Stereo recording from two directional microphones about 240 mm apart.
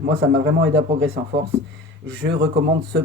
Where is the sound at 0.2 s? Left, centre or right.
Right.